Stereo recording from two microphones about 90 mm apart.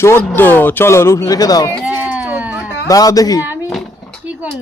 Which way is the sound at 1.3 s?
45° left (ahead or behind).